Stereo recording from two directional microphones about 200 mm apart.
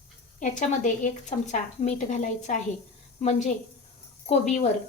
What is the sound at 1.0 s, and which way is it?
A woman's voice, 35° left (ahead or behind).